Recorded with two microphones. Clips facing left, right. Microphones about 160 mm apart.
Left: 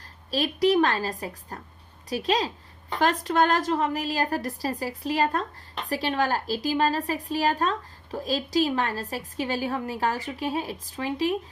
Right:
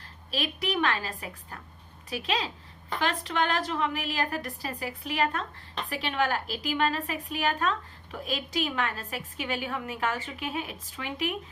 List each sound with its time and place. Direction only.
0.3 s a woman's voice: 40° left (ahead or behind)